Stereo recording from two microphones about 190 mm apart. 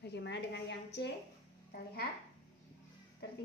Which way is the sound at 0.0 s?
65° left (ahead or behind).